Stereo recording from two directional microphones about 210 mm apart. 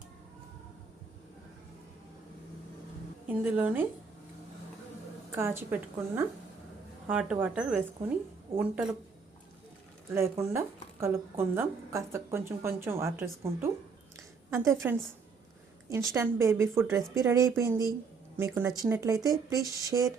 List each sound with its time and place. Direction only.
3.2 s speech: 10° right (ahead or behind)
5.3 s speech: 10° right (ahead or behind)
10.2 s speech: 15° right (ahead or behind)
14.2 s a sound: 15° right (ahead or behind)
16.1 s speech: 15° right (ahead or behind)